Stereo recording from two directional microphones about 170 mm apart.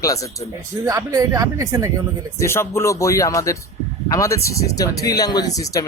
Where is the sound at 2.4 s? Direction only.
15° left (ahead or behind).